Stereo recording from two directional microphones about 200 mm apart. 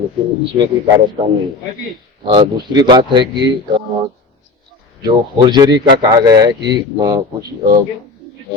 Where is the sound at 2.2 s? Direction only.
20° right (ahead or behind).